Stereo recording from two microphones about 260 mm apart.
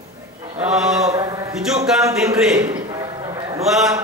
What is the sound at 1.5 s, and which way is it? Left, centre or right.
A man's voice, centre.